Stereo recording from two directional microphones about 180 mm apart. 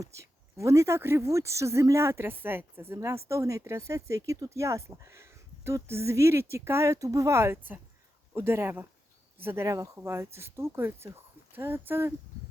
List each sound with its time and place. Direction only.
0.0 s speech: 15° right (ahead or behind)